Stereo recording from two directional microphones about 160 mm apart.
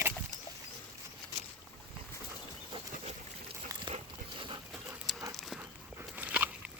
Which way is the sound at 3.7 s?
20° right (ahead or behind).